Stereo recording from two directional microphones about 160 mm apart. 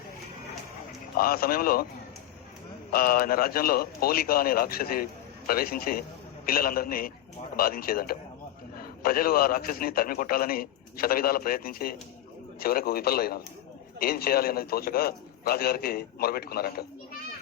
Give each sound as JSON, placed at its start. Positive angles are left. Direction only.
{"t": 1.1, "sound": "a man's voice", "side_deg": 70}
{"t": 2.9, "sound": "a man's voice", "side_deg": 65}